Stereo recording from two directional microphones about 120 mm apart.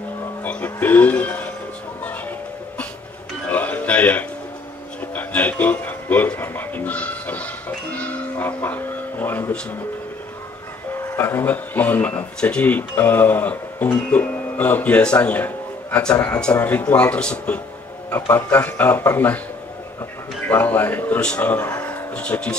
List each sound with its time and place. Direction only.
0.4 s music: 15° left (ahead or behind)
3.4 s music: 15° left (ahead or behind)
5.1 s speech: 15° left (ahead or behind)
10.9 s speech: 20° left (ahead or behind)
20.4 s speech: 15° left (ahead or behind)
21.8 s music: 10° left (ahead or behind)